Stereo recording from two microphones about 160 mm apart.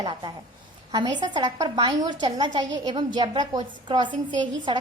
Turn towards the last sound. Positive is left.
turn(degrees=-30)  # may be behind; listen again after turning